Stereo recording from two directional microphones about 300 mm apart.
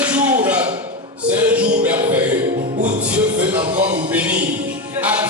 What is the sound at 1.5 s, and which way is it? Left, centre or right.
Music, centre.